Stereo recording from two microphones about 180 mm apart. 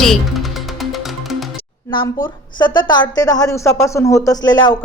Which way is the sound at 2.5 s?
25° left (ahead or behind).